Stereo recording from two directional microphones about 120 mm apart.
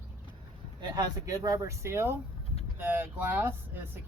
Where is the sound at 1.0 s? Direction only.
30° right (ahead or behind).